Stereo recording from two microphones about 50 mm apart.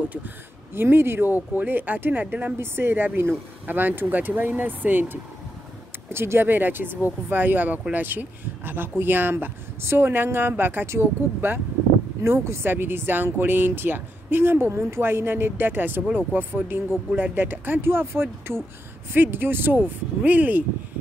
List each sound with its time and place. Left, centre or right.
0.7 s speech: right
2.6 s speech: right
6.0 s speech: right
12.2 s speech: right
12.7 s speech: right
16.1 s speech: right
17.1 s speech: right